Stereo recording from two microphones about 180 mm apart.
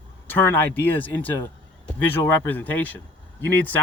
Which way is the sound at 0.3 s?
10° left (ahead or behind).